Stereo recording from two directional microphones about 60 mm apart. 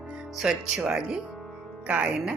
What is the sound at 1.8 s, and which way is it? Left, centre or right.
Speech, right.